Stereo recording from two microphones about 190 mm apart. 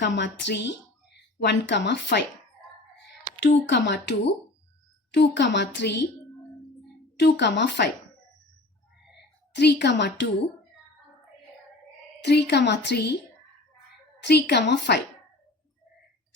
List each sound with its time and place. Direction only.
0.0 s speech: 70° left (ahead or behind)
3.4 s a woman's voice: 70° left (ahead or behind)
7.2 s a woman's voice: 65° left (ahead or behind)
9.1 s a woman's voice: 60° left (ahead or behind)
12.2 s a woman's voice: 60° left (ahead or behind)
14.2 s a woman's voice: 60° left (ahead or behind)